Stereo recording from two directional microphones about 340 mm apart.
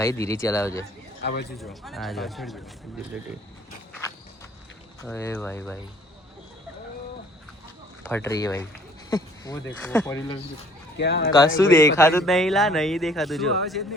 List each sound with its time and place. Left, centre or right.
0.0 s speech: centre
1.2 s speech: left
1.5 s a man's voice: centre
5.0 s speech: centre
8.0 s speech: centre
9.0 s a sound: centre
9.8 s speech: centre
10.9 s speech: left
11.3 s a man's voice: centre